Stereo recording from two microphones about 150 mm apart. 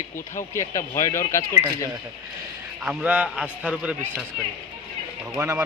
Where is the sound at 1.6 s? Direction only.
20° right (ahead or behind).